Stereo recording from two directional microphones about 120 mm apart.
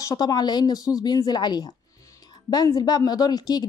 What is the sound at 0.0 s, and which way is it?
Speech, 30° left (ahead or behind).